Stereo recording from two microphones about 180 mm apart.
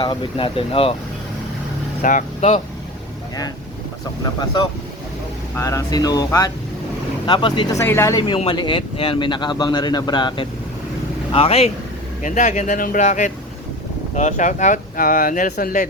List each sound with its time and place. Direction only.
0.0 s speech: 25° left (ahead or behind)
2.0 s speech: 45° left (ahead or behind)
5.5 s speech: 20° left (ahead or behind)
7.8 s speech: 15° left (ahead or behind)
8.2 s speech: 30° left (ahead or behind); by 15.9 s 50° left (ahead or behind)